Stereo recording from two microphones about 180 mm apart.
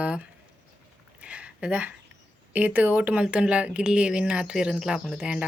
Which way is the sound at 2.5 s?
10° right (ahead or behind).